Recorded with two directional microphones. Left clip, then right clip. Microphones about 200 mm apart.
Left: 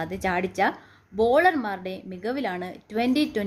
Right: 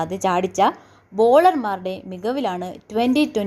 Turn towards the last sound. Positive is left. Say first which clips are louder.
# right 5 dB
turn(degrees=-15)  # may be behind; listen again after turning